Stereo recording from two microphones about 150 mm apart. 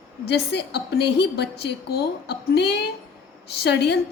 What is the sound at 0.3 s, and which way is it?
A woman's voice, 90° left.